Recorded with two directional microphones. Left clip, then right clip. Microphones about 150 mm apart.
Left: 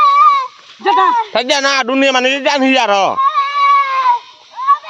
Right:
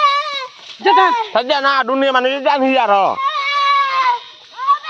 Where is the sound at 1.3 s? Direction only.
85° left; by 3.2 s 55° left (ahead or behind).